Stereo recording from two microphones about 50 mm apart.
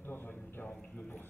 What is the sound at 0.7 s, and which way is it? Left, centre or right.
Speech, left.